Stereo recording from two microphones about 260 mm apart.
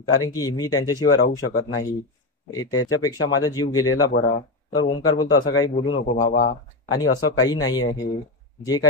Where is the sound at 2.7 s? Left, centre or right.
Left.